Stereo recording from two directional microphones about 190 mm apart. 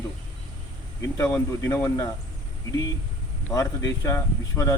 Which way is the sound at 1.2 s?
15° left (ahead or behind).